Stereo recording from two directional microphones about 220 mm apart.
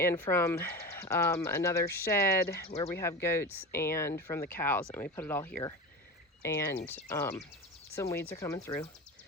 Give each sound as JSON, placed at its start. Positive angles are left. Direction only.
{"t": 0.0, "sound": "speech", "side_deg": 10}
{"t": 2.6, "sound": "speech", "side_deg": 30}
{"t": 2.9, "sound": "speech", "side_deg": 10}